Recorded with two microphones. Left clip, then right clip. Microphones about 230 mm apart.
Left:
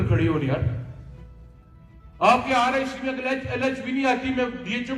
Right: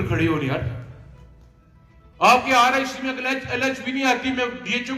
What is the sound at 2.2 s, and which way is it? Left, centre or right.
A man's voice, right.